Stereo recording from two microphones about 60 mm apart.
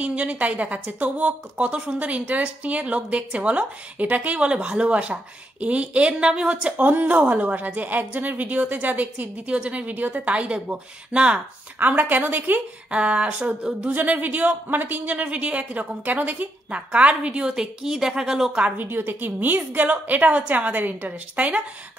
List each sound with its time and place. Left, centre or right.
0.0 s speech: right
11.8 s a woman's voice: right
12.9 s speech: centre
18.9 s speech: right